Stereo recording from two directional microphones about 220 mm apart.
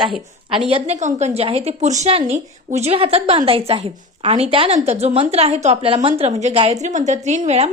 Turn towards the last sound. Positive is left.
turn(degrees=-30)  # may be behind; listen again after turning